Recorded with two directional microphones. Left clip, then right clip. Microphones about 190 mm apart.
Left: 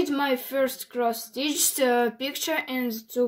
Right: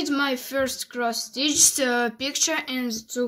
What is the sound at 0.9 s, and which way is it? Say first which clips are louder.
Speech: even; 50° right (ahead or behind).